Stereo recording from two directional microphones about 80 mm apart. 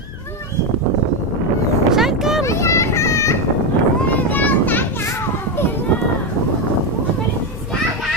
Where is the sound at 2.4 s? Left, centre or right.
Left.